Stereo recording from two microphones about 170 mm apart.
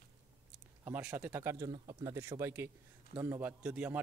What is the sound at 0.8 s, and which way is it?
A man's voice, 10° right (ahead or behind).